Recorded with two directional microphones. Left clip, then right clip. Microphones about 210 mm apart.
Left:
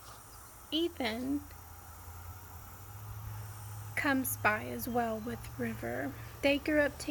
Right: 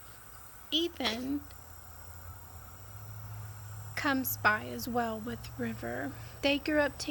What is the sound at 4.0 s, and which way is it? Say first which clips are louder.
A woman's voice: even; 5° right (ahead or behind).